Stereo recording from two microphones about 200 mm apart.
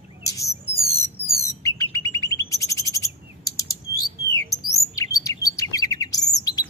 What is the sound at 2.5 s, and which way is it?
Chirp, 15° left (ahead or behind).